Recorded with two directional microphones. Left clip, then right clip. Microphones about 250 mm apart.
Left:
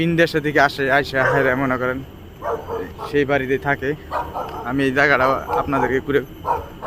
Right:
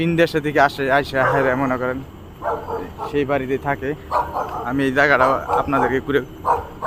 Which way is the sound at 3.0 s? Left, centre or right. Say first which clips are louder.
Left 2 dB; centre.